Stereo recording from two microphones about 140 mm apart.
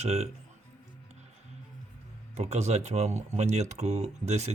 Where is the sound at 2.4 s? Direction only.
50° right (ahead or behind).